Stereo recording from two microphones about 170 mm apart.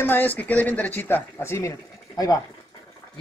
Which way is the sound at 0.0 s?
10° left (ahead or behind).